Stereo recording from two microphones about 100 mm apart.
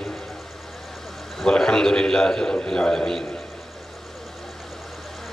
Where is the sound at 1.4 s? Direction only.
5° left (ahead or behind).